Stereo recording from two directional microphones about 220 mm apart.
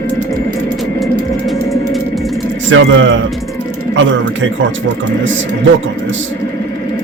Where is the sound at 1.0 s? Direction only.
Centre (ahead or behind).